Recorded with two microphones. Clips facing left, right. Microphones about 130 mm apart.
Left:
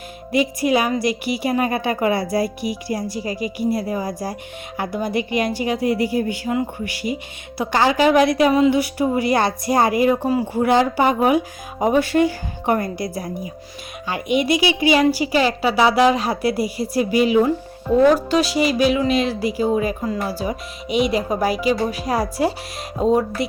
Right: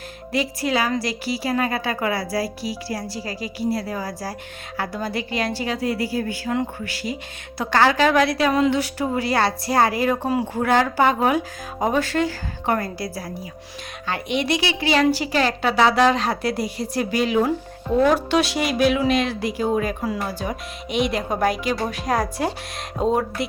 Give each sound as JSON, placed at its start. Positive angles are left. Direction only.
{"t": 0.3, "sound": "a woman's voice", "side_deg": 15}